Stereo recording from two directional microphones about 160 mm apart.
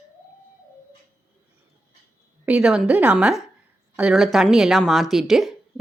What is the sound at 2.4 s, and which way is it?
A woman's voice, 5° right (ahead or behind).